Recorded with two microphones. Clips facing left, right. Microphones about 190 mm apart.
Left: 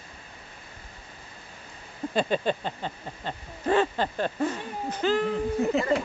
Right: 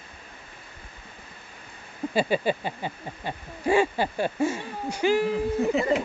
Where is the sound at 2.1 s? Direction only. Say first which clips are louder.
Right 1 dB; 10° right (ahead or behind).